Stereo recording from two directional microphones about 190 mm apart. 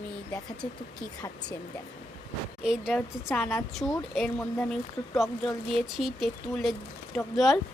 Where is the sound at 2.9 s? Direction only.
10° left (ahead or behind).